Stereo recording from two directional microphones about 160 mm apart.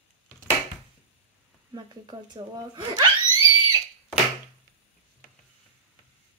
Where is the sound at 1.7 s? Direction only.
25° right (ahead or behind).